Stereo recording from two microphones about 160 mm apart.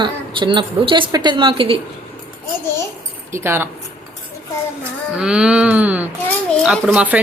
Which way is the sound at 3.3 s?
15° right (ahead or behind).